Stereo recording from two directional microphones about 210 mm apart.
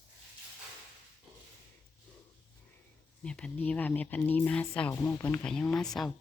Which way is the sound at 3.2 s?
5° left (ahead or behind).